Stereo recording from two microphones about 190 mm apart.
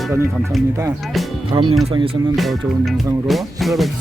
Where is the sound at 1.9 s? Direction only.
30° right (ahead or behind).